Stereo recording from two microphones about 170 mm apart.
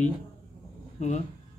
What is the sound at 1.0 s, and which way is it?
Speech, 45° left (ahead or behind).